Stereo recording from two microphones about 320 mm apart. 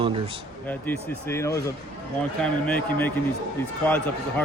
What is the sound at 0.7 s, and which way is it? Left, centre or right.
Speech, centre.